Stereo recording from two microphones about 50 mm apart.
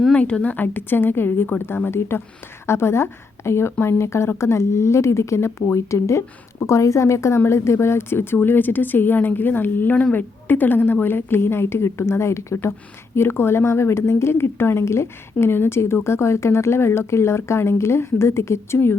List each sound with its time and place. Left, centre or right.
0.1 s speech: left
0.4 s a woman's voice: left
6.7 s a woman's voice: left
7.3 s a woman's voice: left
13.1 s speech: left